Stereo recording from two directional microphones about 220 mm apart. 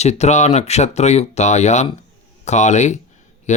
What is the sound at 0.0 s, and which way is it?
Speech, 30° left (ahead or behind).